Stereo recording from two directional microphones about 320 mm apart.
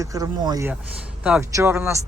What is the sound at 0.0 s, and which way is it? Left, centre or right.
Speech, centre.